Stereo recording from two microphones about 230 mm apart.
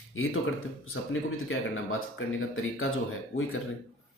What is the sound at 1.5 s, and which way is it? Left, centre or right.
Speech, left.